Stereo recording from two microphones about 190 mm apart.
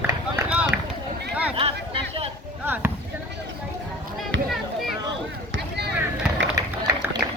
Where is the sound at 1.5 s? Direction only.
30° right (ahead or behind).